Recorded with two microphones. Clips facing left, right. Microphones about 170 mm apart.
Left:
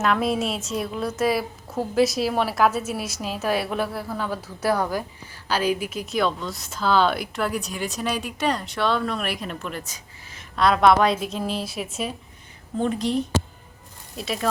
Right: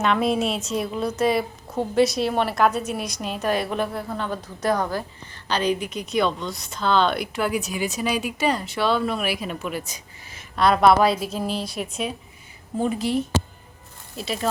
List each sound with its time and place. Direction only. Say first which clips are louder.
0.0 s a woman's voice: right 1 dB; centre (ahead or behind)